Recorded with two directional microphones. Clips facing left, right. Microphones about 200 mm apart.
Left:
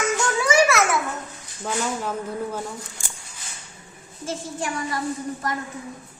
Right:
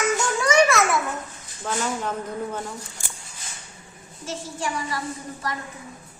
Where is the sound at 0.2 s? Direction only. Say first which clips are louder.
Left 1 dB; 5° left (ahead or behind).